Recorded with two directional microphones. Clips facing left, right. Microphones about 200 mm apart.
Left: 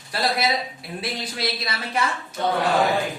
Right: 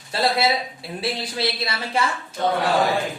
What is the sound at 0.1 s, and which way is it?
Speech, 25° right (ahead or behind).